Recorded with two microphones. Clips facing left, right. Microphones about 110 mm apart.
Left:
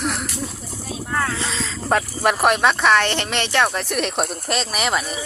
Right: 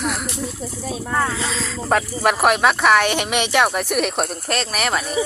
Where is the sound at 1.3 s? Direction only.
Centre (ahead or behind).